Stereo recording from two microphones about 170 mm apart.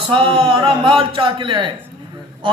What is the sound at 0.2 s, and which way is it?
A man's voice, 30° right (ahead or behind).